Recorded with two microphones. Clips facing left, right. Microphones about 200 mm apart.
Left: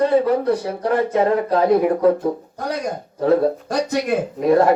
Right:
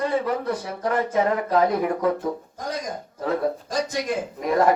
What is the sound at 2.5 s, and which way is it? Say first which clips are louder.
Speech: left 5 dB; 65° left (ahead or behind).